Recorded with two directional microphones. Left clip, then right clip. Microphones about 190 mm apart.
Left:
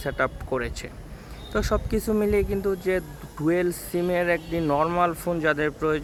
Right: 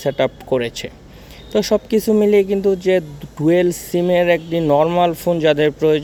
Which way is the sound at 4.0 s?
5° left (ahead or behind).